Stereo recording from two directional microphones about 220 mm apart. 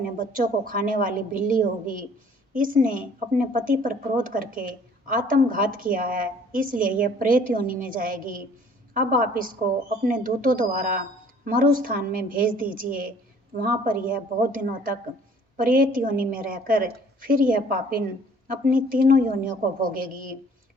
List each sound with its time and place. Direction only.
0.2 s a woman's voice: 40° right (ahead or behind)